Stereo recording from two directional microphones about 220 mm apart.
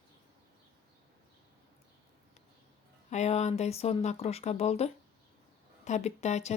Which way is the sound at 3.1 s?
30° left (ahead or behind).